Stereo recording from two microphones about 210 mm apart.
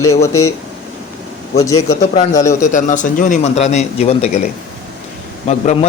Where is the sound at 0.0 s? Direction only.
15° left (ahead or behind).